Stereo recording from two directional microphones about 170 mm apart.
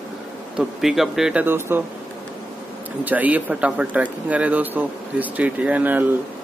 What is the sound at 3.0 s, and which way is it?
Speech, 10° right (ahead or behind).